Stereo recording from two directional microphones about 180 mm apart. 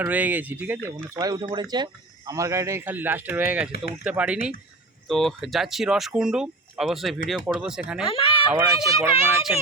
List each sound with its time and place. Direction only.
0.0 s speech: 10° right (ahead or behind)
1.1 s speech: 20° right (ahead or behind); by 8.0 s 5° right (ahead or behind)
8.0 s speech: 30° left (ahead or behind)
8.6 s speech: 20° right (ahead or behind)